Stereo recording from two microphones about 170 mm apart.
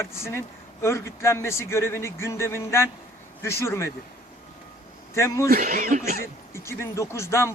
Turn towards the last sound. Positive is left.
turn(degrees=15)  # may be behind; listen again after turning